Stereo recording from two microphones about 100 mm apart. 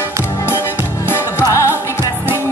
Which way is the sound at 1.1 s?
25° left (ahead or behind).